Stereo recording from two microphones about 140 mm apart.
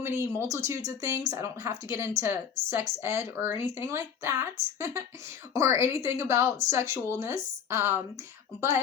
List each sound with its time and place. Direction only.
0.0 s speech: 20° right (ahead or behind)